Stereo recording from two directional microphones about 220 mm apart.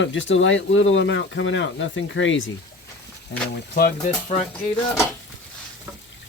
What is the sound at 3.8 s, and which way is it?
Speech, 35° left (ahead or behind).